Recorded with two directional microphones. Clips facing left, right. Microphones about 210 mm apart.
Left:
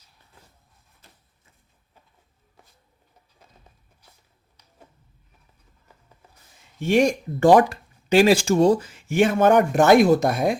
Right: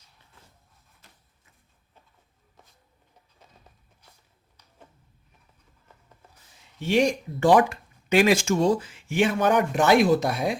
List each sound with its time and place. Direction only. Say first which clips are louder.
6.7 s speech: left 3 dB; 50° left (ahead or behind)